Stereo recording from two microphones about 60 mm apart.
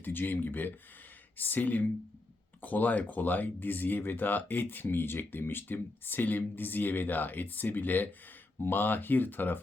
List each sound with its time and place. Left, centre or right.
0.0 s speech: left